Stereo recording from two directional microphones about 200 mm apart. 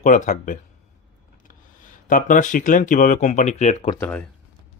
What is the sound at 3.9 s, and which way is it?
Speech, 10° left (ahead or behind).